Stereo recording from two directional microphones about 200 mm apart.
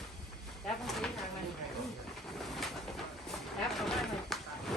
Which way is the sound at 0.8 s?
Centre (ahead or behind).